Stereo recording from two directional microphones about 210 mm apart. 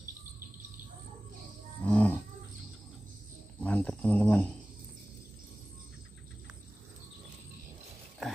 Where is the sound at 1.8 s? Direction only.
5° left (ahead or behind).